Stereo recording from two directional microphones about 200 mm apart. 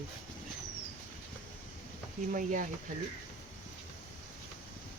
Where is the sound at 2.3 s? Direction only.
40° right (ahead or behind).